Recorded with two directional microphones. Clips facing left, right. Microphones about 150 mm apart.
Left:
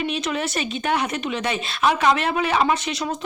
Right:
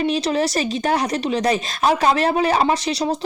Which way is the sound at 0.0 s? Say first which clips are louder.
Right 5 dB; 35° right (ahead or behind).